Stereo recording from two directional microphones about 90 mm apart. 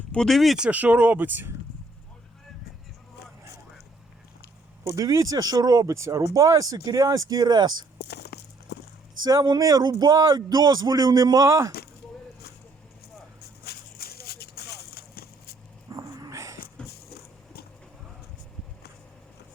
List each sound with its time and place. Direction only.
0.1 s speech: 5° left (ahead or behind)
0.6 s speech: 15° right (ahead or behind)
4.8 s speech: 40° right (ahead or behind)
9.2 s speech: 50° right (ahead or behind)
15.9 s dog: 40° right (ahead or behind)
16.8 s a sound: 10° left (ahead or behind)